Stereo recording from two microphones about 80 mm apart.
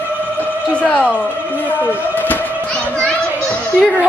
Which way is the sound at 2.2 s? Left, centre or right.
Left.